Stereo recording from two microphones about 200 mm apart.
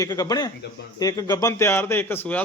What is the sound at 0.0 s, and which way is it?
A man's voice, 20° left (ahead or behind).